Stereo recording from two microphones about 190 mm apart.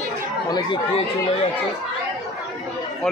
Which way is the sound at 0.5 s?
25° left (ahead or behind).